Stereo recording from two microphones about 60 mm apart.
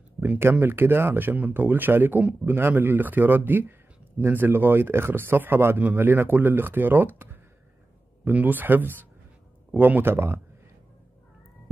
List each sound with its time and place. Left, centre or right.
0.4 s speech: right